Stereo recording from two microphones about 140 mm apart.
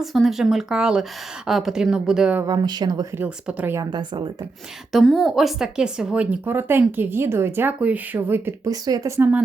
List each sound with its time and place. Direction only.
0.0 s a woman's voice: centre (ahead or behind)
2.4 s speech: 30° right (ahead or behind)
3.2 s speech: 10° right (ahead or behind)
3.8 s a woman's voice: 30° right (ahead or behind)
4.9 s a woman's voice: centre (ahead or behind); by 9.4 s 20° right (ahead or behind)